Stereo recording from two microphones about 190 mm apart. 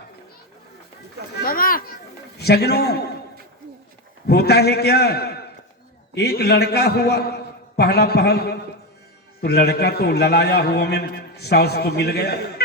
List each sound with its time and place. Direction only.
1.4 s a child's voice: 50° left (ahead or behind)
2.4 s a man's voice: 60° left (ahead or behind)
4.3 s a man's voice: 60° left (ahead or behind)